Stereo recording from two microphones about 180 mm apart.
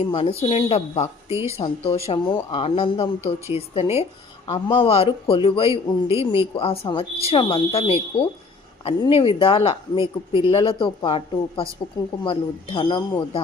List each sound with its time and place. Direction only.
0.0 s speech: 30° left (ahead or behind)
1.3 s speech: 15° right (ahead or behind)
1.5 s a woman's voice: 30° left (ahead or behind)
4.4 s speech: 25° left (ahead or behind)
5.7 s speech: 15° right (ahead or behind)
6.3 s a woman's voice: 30° left (ahead or behind)